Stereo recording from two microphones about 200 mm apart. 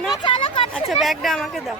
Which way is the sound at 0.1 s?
25° left (ahead or behind).